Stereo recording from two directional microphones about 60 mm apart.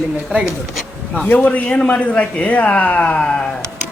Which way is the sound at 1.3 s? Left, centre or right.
Left.